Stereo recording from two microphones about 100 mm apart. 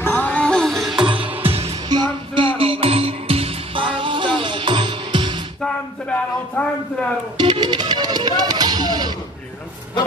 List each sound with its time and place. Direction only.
0.0 s music: 15° left (ahead or behind); by 1.0 s centre (ahead or behind)
1.0 s music: 60° right (ahead or behind)
1.4 s music: 80° right
1.9 s music: 50° right (ahead or behind)
5.6 s music: 10° left (ahead or behind)
7.3 s music: 50° right (ahead or behind)